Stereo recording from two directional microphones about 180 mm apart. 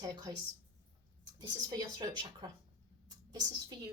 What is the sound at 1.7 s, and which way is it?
Speech, 25° right (ahead or behind).